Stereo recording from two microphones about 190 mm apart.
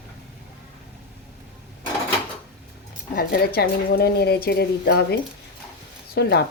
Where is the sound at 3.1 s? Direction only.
55° left (ahead or behind).